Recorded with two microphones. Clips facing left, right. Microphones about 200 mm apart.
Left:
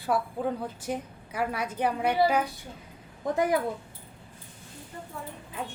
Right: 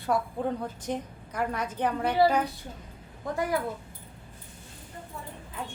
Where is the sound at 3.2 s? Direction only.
20° left (ahead or behind).